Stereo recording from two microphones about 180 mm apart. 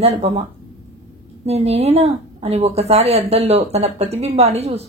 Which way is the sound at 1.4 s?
35° right (ahead or behind).